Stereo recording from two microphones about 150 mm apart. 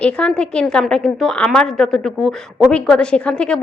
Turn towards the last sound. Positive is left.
turn(degrees=5)  # may be behind; listen again after turning